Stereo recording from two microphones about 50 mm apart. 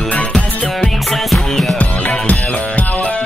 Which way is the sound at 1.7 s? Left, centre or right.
Left.